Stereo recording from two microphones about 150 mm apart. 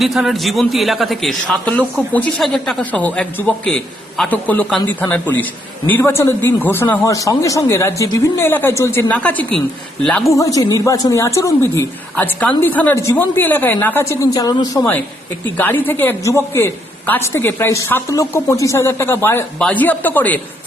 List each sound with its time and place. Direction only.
0.0 s a man's voice: centre (ahead or behind)
10.2 s a woman's voice: 20° left (ahead or behind)
15.5 s a man's voice: 15° left (ahead or behind)